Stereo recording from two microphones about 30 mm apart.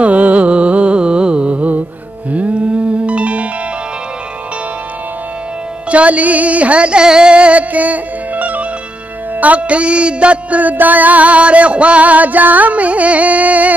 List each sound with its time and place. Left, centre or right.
0.0 s music: right
1.6 s music: right
5.9 s music: right
7.3 s music: right
7.7 s music: right
10.6 s music: right